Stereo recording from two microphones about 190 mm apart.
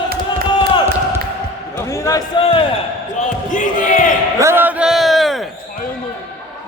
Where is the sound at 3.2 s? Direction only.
40° left (ahead or behind).